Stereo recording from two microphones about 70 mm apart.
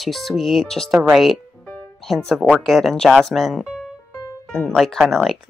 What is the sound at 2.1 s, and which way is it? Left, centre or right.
Speech, centre.